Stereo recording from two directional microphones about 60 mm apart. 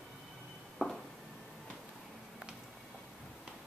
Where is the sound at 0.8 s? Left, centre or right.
Centre.